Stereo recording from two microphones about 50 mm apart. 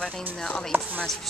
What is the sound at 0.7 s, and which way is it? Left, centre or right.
Speech, right.